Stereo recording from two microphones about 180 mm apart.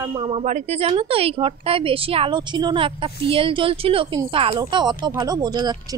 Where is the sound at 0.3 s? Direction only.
30° right (ahead or behind).